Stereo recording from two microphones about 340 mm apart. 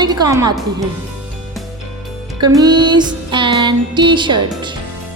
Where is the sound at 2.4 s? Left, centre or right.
Centre.